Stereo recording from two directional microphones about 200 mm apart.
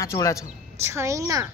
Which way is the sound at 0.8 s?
15° right (ahead or behind).